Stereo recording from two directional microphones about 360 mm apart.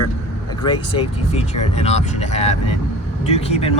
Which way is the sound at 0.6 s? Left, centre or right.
Centre.